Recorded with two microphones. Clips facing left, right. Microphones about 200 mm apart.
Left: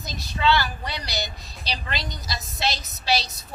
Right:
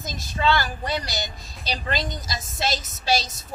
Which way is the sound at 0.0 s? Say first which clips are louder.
Even; 50° right (ahead or behind).